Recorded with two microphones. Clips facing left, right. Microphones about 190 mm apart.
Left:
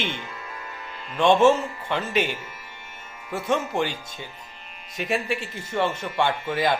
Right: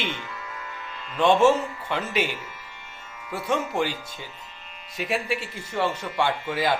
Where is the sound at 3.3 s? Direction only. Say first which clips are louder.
Left 2 dB; 25° left (ahead or behind).